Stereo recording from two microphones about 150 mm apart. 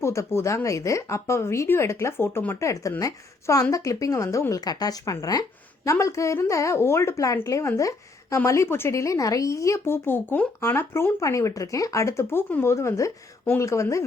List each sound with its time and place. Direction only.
0.0 s speech: 20° left (ahead or behind)